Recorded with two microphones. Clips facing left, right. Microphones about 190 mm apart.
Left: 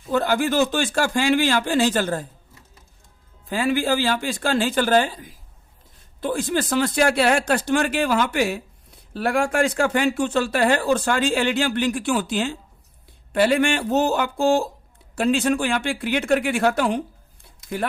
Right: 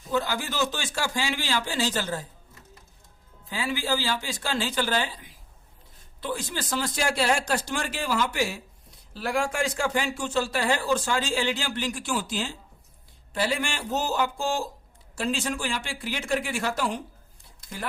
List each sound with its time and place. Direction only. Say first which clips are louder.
0.1 s speech: left 8 dB; 55° left (ahead or behind)
3.5 s speech: left 7 dB; 55° left (ahead or behind)